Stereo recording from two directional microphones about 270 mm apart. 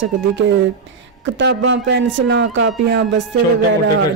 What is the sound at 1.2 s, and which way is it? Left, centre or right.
A man's voice, right.